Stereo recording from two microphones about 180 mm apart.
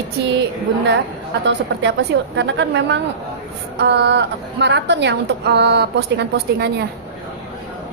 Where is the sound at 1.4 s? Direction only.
80° right.